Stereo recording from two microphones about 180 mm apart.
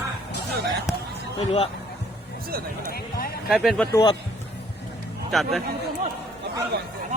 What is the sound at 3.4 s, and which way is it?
Speech, centre (ahead or behind).